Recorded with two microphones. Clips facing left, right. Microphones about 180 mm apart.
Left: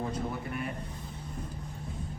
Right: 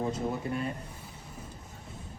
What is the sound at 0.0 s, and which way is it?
Speech, 25° right (ahead or behind).